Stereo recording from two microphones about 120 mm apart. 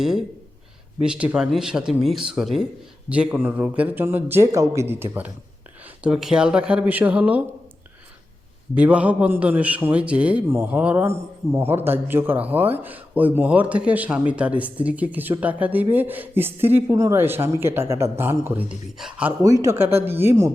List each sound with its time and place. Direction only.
0.0 s a man's voice: 5° right (ahead or behind); by 5.0 s 20° right (ahead or behind)
6.0 s a man's voice: 5° right (ahead or behind)
8.7 s a man's voice: 10° right (ahead or behind)
18.9 s a man's voice: 5° right (ahead or behind)
19.4 s speech: 25° right (ahead or behind)